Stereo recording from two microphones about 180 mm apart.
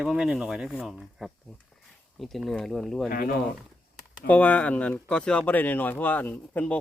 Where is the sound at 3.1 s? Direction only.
55° left (ahead or behind).